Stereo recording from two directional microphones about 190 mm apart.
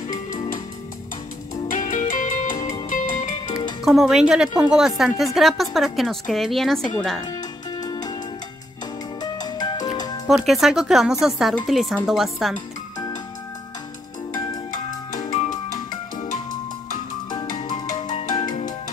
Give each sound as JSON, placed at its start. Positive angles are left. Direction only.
{"t": 0.1, "sound": "music", "side_deg": 45}
{"t": 1.7, "sound": "music", "side_deg": 40}
{"t": 3.8, "sound": "a woman's voice", "side_deg": 0}
{"t": 7.8, "sound": "music", "side_deg": 20}
{"t": 9.2, "sound": "music", "side_deg": 20}
{"t": 10.2, "sound": "a woman's voice", "side_deg": 0}
{"t": 15.1, "sound": "music", "side_deg": 40}
{"t": 17.5, "sound": "music", "side_deg": 45}
{"t": 18.3, "sound": "music", "side_deg": 20}